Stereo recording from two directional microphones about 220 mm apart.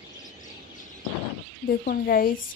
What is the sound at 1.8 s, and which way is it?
Speech, 40° left (ahead or behind).